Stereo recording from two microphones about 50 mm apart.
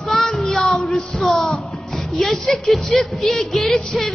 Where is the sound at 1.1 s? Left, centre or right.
Centre.